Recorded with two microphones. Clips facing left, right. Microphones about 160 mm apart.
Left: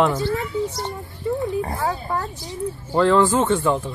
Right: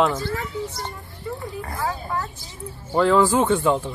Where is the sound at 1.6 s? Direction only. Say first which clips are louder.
Left 4 dB; 30° left (ahead or behind).